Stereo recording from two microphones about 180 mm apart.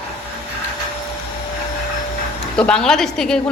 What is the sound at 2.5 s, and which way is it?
Speech, 5° left (ahead or behind).